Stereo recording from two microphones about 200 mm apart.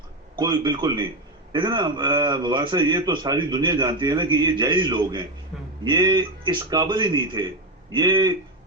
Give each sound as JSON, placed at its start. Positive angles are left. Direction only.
{"t": 0.3, "sound": "a man's voice", "side_deg": -20}